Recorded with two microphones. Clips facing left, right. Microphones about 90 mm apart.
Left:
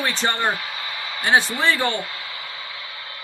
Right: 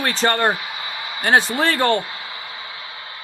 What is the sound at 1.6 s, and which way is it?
Speech, 45° right (ahead or behind).